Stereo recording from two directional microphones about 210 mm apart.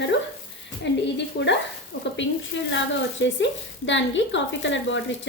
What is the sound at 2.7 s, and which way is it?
A woman's voice, 60° left (ahead or behind).